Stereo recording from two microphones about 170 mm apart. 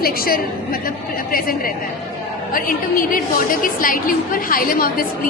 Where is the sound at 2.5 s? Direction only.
55° left (ahead or behind).